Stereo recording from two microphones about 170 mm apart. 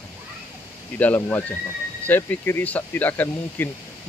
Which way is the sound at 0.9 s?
10° left (ahead or behind).